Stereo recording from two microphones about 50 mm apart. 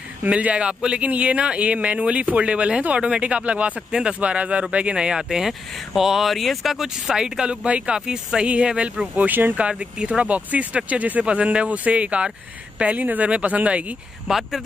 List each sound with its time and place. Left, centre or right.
0.3 s speech: right
9.1 s speech: right
9.7 s speech: right
14.2 s speech: centre